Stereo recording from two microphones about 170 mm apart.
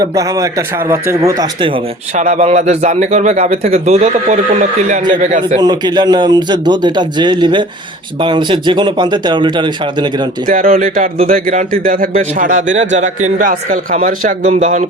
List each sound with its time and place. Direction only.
0.0 s a man's voice: 20° right (ahead or behind)
2.1 s a man's voice: 45° right (ahead or behind)
5.5 s a man's voice: 25° right (ahead or behind)
10.4 s a man's voice: 55° right (ahead or behind)